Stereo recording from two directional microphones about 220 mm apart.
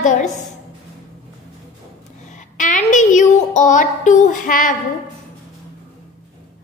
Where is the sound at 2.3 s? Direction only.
35° left (ahead or behind).